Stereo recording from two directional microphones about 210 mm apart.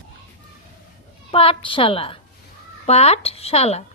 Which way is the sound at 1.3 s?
25° left (ahead or behind).